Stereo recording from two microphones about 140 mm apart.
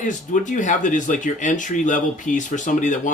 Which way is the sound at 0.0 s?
65° left (ahead or behind).